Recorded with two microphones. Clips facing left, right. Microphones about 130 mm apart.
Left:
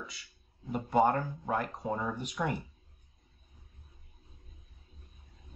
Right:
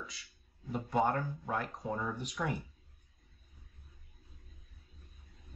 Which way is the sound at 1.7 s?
20° left (ahead or behind).